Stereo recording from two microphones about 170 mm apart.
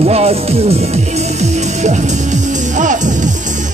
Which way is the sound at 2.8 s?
45° right (ahead or behind).